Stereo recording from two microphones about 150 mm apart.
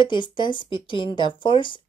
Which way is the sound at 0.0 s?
30° left (ahead or behind).